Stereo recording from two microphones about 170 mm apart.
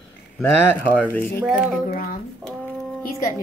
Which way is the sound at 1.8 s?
55° left (ahead or behind).